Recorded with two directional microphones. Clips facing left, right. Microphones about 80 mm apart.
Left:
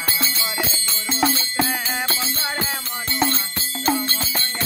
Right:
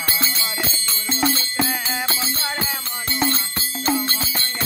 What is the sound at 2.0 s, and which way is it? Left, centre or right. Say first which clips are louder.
Music: even; centre.